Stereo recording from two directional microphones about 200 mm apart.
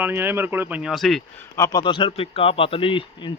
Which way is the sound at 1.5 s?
15° left (ahead or behind).